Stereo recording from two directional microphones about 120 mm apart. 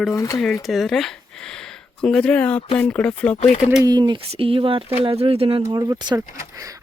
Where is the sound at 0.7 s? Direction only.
Centre (ahead or behind).